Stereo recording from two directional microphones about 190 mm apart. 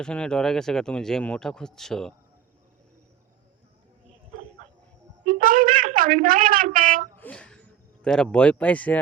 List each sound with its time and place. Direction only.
0.0 s speech: 5° left (ahead or behind)
5.2 s a sound: 45° right (ahead or behind)
7.2 s speech: 5° left (ahead or behind)